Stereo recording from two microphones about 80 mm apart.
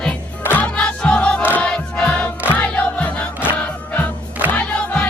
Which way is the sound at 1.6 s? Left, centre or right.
Centre.